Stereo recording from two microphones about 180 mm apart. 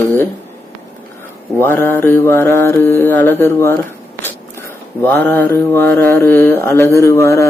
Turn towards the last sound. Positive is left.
turn(degrees=15)  # may be behind; listen again after turning